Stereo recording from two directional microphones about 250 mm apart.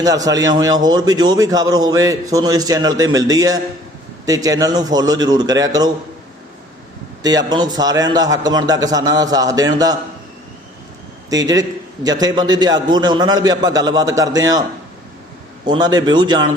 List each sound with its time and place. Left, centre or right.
0.0 s a man's voice: centre
7.2 s a man's voice: centre
11.3 s a man's voice: centre
15.6 s a man's voice: centre